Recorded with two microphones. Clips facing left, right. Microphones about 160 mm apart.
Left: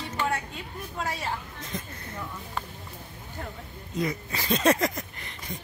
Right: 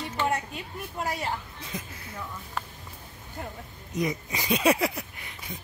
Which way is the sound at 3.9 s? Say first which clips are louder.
Right 1 dB; 20° right (ahead or behind).